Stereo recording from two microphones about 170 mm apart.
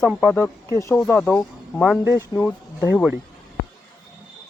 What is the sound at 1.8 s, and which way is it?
Speech, 10° right (ahead or behind).